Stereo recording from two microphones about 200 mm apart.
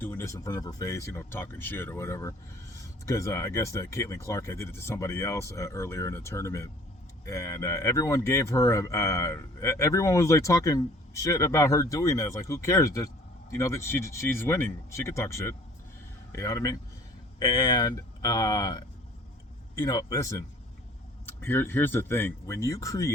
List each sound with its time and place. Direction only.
0.0 s speech: 10° left (ahead or behind)
21.4 s speech: 10° left (ahead or behind)